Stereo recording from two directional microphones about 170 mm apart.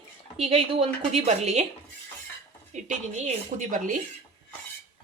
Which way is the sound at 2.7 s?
45° right (ahead or behind).